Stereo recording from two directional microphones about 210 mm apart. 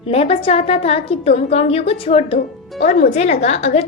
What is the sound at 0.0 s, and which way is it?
A woman's voice, 30° left (ahead or behind).